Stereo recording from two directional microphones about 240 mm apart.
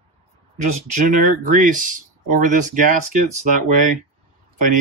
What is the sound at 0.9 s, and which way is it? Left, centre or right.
Speech, right.